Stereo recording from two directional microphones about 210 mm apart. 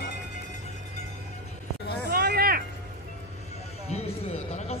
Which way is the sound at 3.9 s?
30° left (ahead or behind).